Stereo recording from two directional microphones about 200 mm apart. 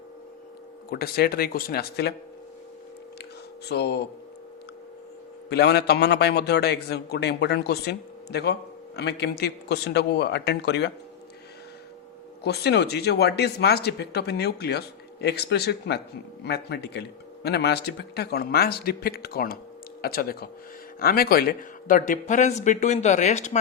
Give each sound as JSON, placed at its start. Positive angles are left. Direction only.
{"t": 0.9, "sound": "a man's voice", "side_deg": 50}
{"t": 3.7, "sound": "speech", "side_deg": 55}
{"t": 5.5, "sound": "speech", "side_deg": 55}
{"t": 12.4, "sound": "a man's voice", "side_deg": 55}